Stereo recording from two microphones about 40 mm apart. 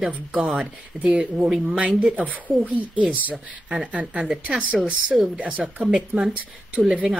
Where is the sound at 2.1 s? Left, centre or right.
Right.